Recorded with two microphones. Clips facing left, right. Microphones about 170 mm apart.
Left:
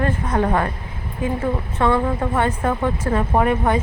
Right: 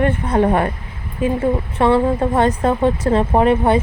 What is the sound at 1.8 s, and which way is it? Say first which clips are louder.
A woman's voice: right 4 dB; 30° right (ahead or behind).